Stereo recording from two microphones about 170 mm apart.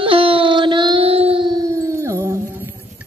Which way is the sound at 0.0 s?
30° right (ahead or behind).